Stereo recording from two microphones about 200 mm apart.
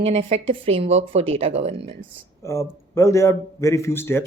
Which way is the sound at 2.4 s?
15° left (ahead or behind).